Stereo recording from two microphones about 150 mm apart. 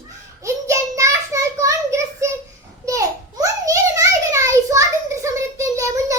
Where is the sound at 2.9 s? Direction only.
20° right (ahead or behind).